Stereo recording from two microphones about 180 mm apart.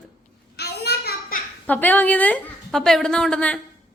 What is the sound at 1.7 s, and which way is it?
A woman's voice, 10° left (ahead or behind).